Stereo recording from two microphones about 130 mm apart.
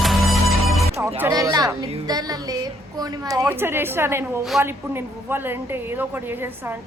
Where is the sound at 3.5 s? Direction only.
15° right (ahead or behind).